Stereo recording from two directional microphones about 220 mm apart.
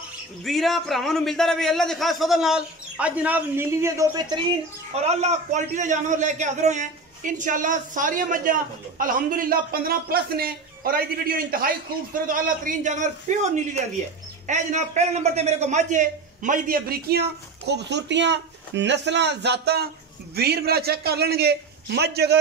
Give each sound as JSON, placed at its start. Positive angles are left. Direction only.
{"t": 0.5, "sound": "a man's voice", "side_deg": 0}
{"t": 5.0, "sound": "a man's voice", "side_deg": -30}
{"t": 17.6, "sound": "a man's voice", "side_deg": -50}